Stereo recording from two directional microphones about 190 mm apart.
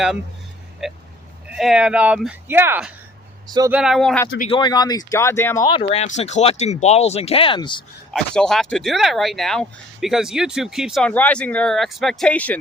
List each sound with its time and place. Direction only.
0.8 s speech: centre (ahead or behind)
4.4 s speech: 25° left (ahead or behind)
5.9 s speech: 35° left (ahead or behind)
8.1 s speech: 5° left (ahead or behind)